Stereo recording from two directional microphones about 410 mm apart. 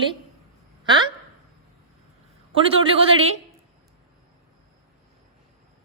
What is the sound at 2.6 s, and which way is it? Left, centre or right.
Speech, centre.